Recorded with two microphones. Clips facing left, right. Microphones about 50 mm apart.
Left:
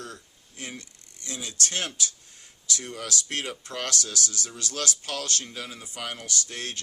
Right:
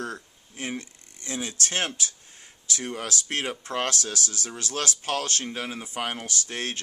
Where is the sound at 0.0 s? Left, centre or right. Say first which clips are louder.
Right 7 dB; right.